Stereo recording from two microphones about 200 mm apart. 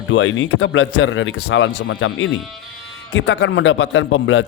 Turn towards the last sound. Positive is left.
turn(degrees=70)  # may be behind; listen again after turning